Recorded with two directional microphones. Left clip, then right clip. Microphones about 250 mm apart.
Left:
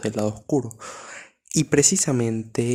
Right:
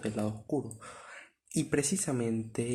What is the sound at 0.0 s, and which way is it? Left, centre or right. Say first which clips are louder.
Speech: left 10 dB; left.